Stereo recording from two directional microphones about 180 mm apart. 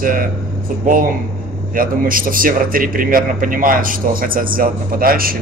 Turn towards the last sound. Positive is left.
turn(degrees=-55)  # may be behind; listen again after turning